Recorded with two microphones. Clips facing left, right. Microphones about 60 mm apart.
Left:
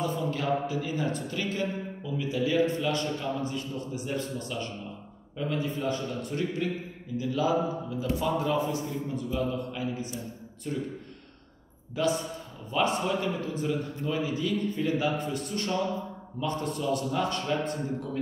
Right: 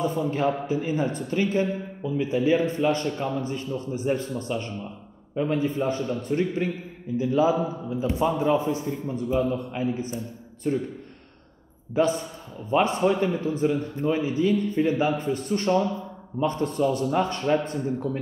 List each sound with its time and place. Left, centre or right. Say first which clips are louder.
0.0 s a man's voice: right 6 dB; right
11.9 s speech: right 5 dB; right